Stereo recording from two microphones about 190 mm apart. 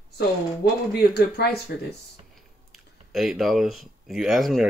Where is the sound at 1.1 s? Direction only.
60° left (ahead or behind).